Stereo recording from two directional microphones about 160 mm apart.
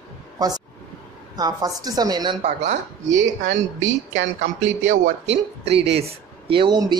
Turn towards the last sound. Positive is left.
turn(degrees=-25)  # may be behind; listen again after turning